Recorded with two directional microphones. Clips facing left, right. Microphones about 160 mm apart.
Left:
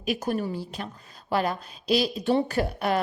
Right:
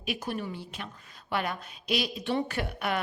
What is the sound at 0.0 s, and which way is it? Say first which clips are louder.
A woman's voice: left 6 dB; 40° left (ahead or behind).